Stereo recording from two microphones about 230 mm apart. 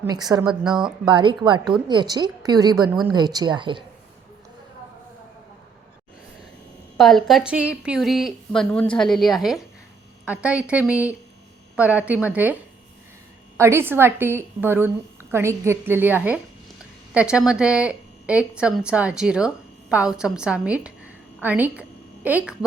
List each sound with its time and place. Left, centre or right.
0.0 s a woman's voice: centre
6.9 s a woman's voice: centre
13.6 s a woman's voice: centre